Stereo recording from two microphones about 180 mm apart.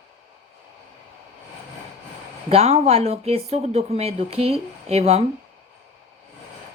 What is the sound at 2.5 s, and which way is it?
Speech, 35° right (ahead or behind).